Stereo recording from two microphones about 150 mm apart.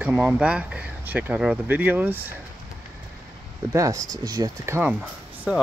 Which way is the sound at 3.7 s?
20° right (ahead or behind).